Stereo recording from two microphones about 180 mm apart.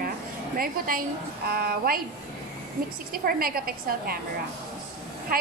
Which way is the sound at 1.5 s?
55° right (ahead or behind).